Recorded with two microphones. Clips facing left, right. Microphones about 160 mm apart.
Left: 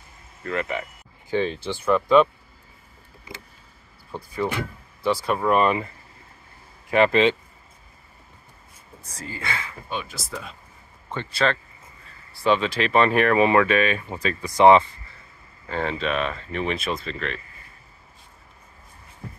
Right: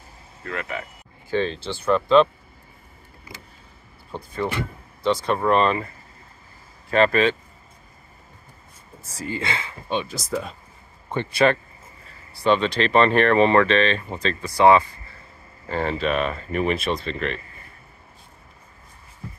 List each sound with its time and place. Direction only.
0.5 s speech: centre (ahead or behind)
1.3 s speech: 15° left (ahead or behind)
4.2 s speech: 10° left (ahead or behind)
6.9 s speech: 15° left (ahead or behind)
9.0 s speech: 5° right (ahead or behind)
9.3 s speech: 25° right (ahead or behind); by 10.5 s 40° right (ahead or behind)
11.1 s speech: 15° right (ahead or behind)
12.4 s speech: 5° left (ahead or behind); by 14.9 s 20° left (ahead or behind)
15.7 s speech: centre (ahead or behind)